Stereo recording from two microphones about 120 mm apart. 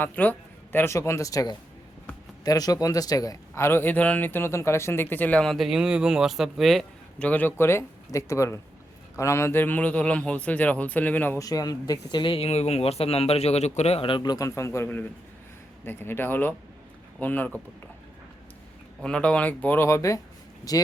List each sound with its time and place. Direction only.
0.0 s speech: 15° left (ahead or behind)
7.3 s speech: 15° left (ahead or behind)
11.3 s speech: 30° left (ahead or behind)
19.0 s speech: 10° left (ahead or behind); by 20.8 s 30° left (ahead or behind)